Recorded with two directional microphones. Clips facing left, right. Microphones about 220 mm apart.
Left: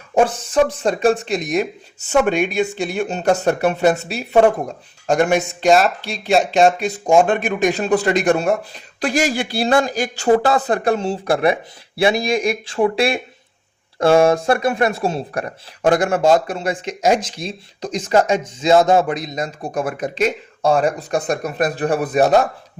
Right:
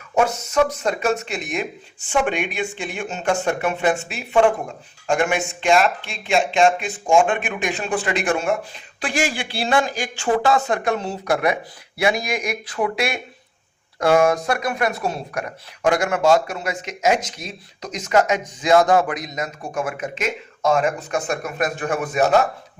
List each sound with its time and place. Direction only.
0.1 s speech: 30° left (ahead or behind)